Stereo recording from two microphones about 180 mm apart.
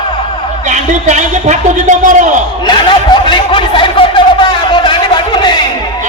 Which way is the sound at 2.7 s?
25° left (ahead or behind).